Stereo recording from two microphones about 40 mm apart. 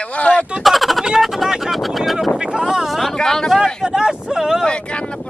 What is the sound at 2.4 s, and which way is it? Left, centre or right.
Speech, centre.